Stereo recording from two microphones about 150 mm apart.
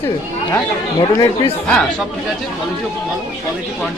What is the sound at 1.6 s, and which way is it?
Speech, 5° left (ahead or behind).